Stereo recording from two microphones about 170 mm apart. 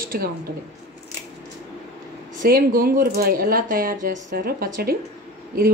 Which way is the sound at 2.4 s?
60° right (ahead or behind).